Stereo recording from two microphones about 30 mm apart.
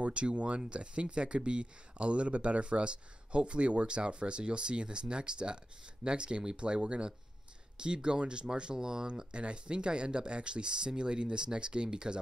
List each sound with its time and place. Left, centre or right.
0.0 s speech: right
9.3 s speech: right